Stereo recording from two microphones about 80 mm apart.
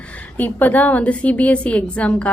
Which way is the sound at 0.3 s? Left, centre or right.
Left.